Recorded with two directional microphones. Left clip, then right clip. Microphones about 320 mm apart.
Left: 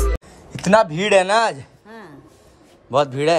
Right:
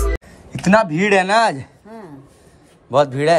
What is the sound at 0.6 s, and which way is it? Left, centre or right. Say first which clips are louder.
Speech: right 1 dB; centre.